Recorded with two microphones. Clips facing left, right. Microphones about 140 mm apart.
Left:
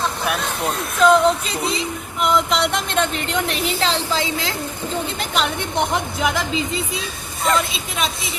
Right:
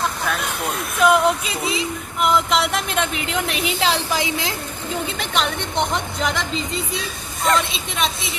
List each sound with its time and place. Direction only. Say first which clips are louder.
1.0 s a woman's voice: left 2 dB; 5° right (ahead or behind); by 4.5 s 20° right (ahead or behind)
5.2 s a woman's voice: left 1 dB; centre (ahead or behind)